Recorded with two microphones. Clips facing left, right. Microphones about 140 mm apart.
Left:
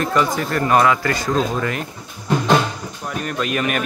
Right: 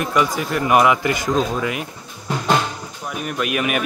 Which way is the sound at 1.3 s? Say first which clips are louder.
Left 1 dB; centre (ahead or behind).